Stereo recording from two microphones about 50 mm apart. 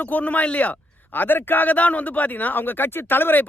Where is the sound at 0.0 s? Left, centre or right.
Left.